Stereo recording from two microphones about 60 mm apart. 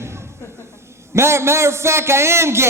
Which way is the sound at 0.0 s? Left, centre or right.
Right.